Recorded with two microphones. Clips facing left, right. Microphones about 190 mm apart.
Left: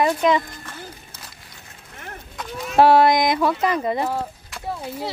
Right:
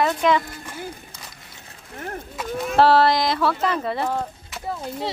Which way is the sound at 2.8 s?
15° left (ahead or behind).